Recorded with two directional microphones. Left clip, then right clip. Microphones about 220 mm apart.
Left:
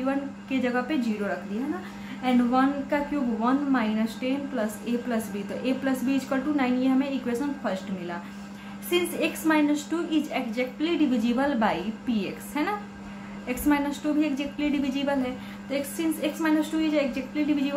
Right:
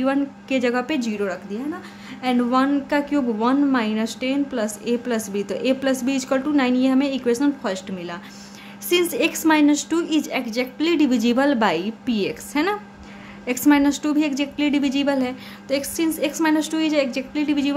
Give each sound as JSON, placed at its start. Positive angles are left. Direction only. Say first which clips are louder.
{"t": 0.0, "sound": "a woman's voice", "louder": "right 7 dB", "side_deg": -50}
{"t": 2.2, "sound": "a woman's voice", "louder": "right 4 dB", "side_deg": -55}